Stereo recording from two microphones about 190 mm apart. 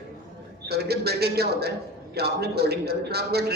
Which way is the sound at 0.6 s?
60° right (ahead or behind).